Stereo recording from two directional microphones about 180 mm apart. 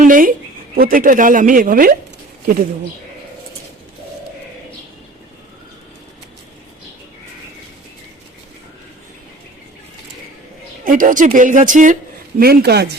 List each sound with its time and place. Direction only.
0.0 s a sound: 50° right (ahead or behind)
0.8 s speech: 50° right (ahead or behind)
10.8 s speech: 50° right (ahead or behind)
12.4 s speech: 60° right (ahead or behind)